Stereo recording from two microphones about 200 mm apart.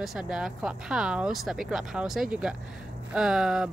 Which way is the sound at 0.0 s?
Centre (ahead or behind).